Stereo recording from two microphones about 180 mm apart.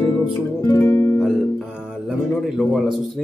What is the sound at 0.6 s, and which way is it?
Speech, 15° left (ahead or behind).